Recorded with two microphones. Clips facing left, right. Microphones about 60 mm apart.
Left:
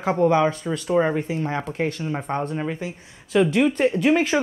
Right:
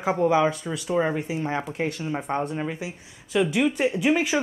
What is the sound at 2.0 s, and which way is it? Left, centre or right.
Speech, centre.